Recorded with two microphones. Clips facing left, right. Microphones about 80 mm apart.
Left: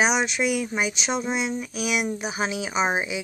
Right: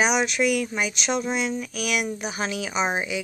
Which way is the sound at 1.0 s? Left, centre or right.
Centre.